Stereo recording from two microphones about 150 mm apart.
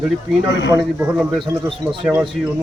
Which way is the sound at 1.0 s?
5° right (ahead or behind).